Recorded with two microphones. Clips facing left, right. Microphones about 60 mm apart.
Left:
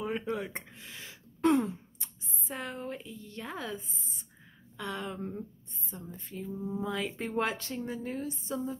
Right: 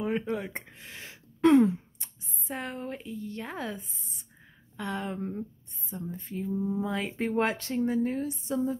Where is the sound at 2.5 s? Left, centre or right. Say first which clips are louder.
Right 2 dB; right.